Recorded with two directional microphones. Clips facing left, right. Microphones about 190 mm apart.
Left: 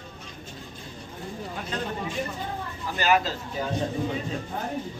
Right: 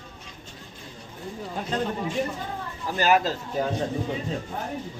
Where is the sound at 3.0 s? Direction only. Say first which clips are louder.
Right 2 dB; 45° right (ahead or behind).